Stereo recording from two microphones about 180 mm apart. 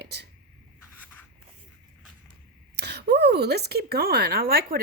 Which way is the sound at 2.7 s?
65° right (ahead or behind).